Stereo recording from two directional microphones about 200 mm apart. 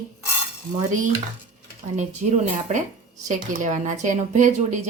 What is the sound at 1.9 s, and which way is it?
Speech, 35° right (ahead or behind).